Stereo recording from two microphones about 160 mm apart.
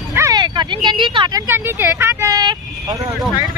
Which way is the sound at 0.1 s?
20° right (ahead or behind).